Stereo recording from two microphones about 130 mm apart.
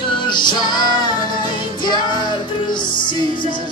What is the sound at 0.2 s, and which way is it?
Music, 35° left (ahead or behind).